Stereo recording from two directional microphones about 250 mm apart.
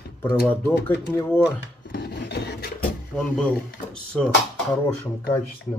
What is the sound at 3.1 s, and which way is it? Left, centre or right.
Speech, centre.